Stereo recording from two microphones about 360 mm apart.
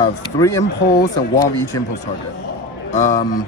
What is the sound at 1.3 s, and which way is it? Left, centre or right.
Speech, centre.